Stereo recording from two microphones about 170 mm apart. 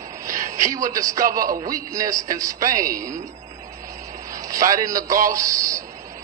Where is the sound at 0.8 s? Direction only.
20° right (ahead or behind).